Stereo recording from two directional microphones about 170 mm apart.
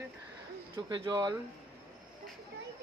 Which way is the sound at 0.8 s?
25° right (ahead or behind).